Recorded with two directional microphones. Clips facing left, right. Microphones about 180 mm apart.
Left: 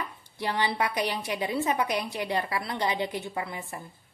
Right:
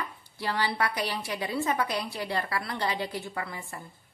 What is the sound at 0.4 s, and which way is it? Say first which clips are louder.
A woman's voice: left 1 dB; 20° left (ahead or behind).